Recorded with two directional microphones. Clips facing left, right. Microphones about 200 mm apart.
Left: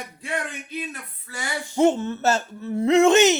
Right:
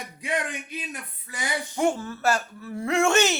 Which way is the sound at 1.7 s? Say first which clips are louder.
Left 7 dB; 20° left (ahead or behind).